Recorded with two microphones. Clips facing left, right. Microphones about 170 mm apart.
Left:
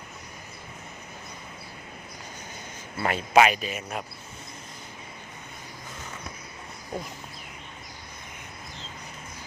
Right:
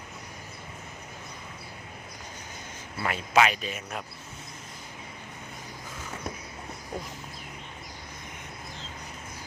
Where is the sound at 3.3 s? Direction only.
20° left (ahead or behind).